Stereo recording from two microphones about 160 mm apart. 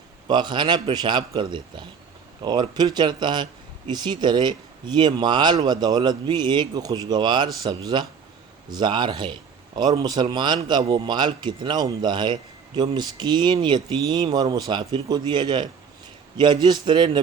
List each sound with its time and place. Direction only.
0.3 s speech: 30° right (ahead or behind)